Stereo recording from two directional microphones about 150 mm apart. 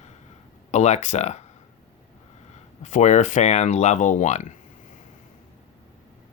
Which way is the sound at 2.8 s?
55° left (ahead or behind).